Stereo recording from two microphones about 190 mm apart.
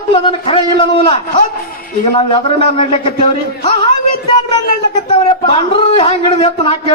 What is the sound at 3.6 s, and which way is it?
A man's voice, 25° left (ahead or behind).